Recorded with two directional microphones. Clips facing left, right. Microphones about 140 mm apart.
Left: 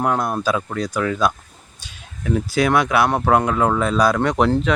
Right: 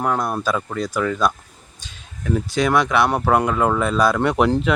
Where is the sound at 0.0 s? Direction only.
5° left (ahead or behind).